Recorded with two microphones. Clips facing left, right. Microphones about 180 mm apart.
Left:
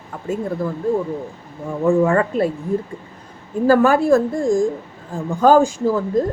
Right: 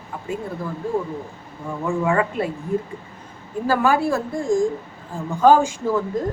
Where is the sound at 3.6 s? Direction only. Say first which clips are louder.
Left 6 dB; 45° left (ahead or behind).